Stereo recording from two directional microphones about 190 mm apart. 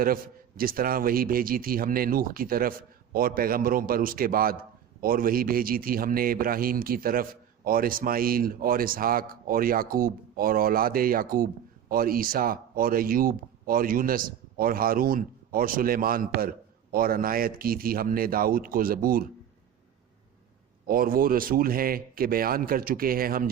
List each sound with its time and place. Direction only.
0.0 s speech: 50° right (ahead or behind)
20.8 s speech: 50° right (ahead or behind)